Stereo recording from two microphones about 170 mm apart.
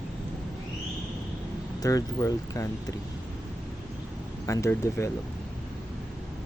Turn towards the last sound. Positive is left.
turn(degrees=15)  # may be behind; listen again after turning